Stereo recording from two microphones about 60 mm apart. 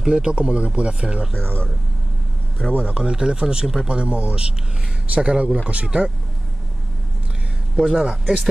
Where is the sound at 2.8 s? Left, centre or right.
Centre.